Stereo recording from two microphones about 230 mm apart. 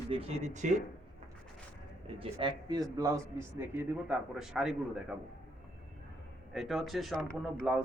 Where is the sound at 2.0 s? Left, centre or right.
Right; by 5.0 s centre.